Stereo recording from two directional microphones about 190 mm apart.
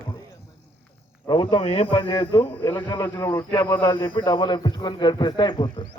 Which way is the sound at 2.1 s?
15° left (ahead or behind).